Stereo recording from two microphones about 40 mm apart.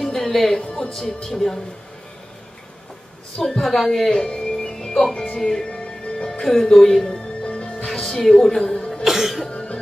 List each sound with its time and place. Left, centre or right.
0.0 s music: centre
0.9 s speech: centre
3.4 s speech: centre
4.1 s music: centre
5.4 s speech: centre
5.7 s music: left
6.4 s speech: centre
7.4 s music: left
7.9 s a woman's voice: centre
9.0 s cough: centre
9.5 s cough: left